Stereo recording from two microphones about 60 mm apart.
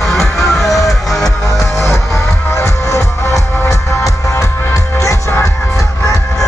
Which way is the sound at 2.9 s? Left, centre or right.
Left.